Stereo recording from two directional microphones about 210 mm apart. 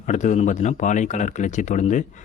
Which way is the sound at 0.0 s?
35° left (ahead or behind).